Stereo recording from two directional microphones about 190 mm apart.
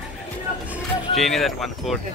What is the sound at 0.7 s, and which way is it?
Speech, centre (ahead or behind).